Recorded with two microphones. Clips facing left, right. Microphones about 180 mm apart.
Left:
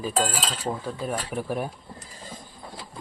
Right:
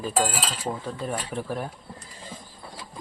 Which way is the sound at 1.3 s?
10° left (ahead or behind).